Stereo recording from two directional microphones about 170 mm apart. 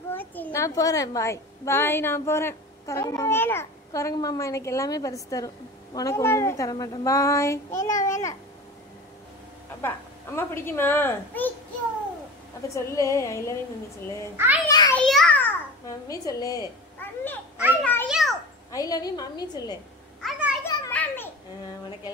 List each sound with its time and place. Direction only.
0.1 s a child's voice: 10° left (ahead or behind)
9.8 s a child's voice: 15° left (ahead or behind)
12.6 s a child's voice: 20° left (ahead or behind)
14.3 s a child's voice: 15° right (ahead or behind)
15.0 s a sound: 5° left (ahead or behind)
15.9 s a woman's voice: 20° left (ahead or behind)
17.0 s a sound: 10° left (ahead or behind)
18.0 s a child's voice: centre (ahead or behind)
18.7 s a woman's voice: 20° left (ahead or behind)
20.2 s children playing: 5° right (ahead or behind)
20.6 s children playing: 20° left (ahead or behind)
20.9 s babbling: 10° left (ahead or behind)